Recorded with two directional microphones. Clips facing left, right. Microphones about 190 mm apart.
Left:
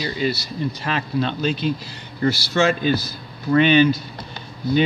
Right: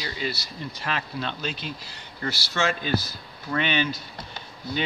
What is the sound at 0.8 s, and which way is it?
Speech, 30° left (ahead or behind).